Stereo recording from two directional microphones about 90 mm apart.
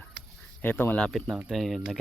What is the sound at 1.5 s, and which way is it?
Speech, centre (ahead or behind).